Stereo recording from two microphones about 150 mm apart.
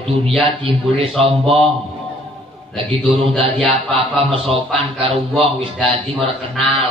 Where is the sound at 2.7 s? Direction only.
40° right (ahead or behind).